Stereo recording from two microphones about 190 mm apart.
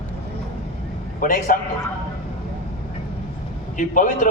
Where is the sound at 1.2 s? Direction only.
45° left (ahead or behind).